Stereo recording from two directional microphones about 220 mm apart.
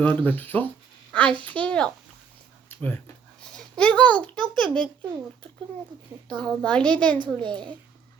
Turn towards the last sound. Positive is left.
turn(degrees=-20)  # may be behind; listen again after turning